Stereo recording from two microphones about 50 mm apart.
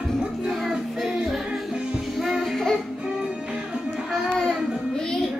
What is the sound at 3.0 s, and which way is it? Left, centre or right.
Music, centre.